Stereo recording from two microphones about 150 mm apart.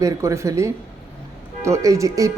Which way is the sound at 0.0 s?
20° right (ahead or behind).